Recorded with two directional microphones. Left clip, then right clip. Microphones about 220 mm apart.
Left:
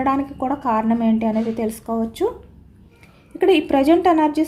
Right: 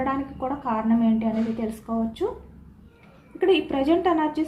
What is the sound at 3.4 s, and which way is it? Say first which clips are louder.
A woman's voice: left 6 dB; 55° left (ahead or behind).